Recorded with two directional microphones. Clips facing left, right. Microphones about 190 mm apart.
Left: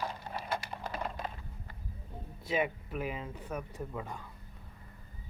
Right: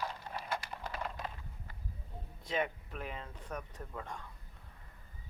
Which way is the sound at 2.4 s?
5° left (ahead or behind).